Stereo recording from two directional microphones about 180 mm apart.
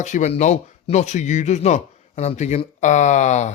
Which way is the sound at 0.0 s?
40° left (ahead or behind).